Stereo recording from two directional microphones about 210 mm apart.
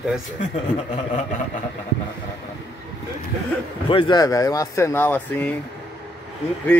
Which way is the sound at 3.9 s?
25° left (ahead or behind).